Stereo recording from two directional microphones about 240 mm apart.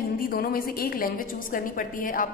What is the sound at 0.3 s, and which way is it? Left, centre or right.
A woman's voice, left.